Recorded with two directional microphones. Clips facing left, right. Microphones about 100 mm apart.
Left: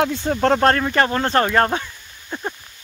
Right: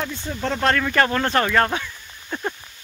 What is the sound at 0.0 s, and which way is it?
Speech, 75° left (ahead or behind).